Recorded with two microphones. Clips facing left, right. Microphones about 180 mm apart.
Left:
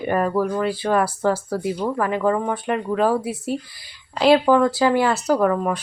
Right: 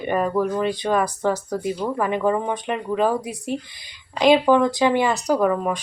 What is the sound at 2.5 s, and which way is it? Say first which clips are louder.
Speech: left 1 dB; 5° left (ahead or behind).